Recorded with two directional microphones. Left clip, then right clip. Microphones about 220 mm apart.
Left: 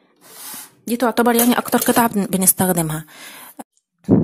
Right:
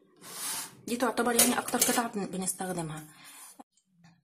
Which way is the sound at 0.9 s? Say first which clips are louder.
Left 12 dB; 45° left (ahead or behind).